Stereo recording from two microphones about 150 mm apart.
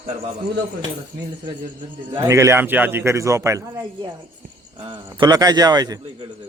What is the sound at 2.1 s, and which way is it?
A man's voice, 20° right (ahead or behind).